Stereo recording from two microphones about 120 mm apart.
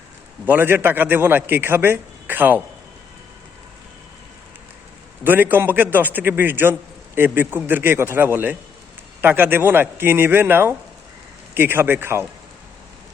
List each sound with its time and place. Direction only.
0.4 s a man's voice: 15° right (ahead or behind)
5.2 s a man's voice: 15° right (ahead or behind)